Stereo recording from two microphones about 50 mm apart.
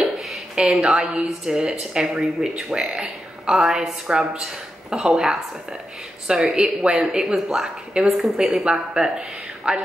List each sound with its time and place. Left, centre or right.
0.6 s a woman's voice: centre